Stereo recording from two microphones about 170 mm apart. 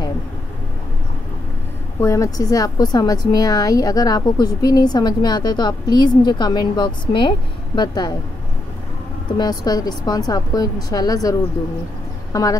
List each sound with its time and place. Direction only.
2.0 s speech: 20° left (ahead or behind)
9.4 s speech: 25° left (ahead or behind)